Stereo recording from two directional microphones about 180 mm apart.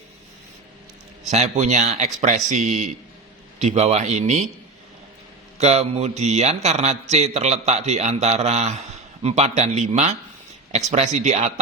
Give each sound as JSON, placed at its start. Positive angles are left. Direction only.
{"t": 1.3, "sound": "speech", "side_deg": -40}
{"t": 5.5, "sound": "speech", "side_deg": -35}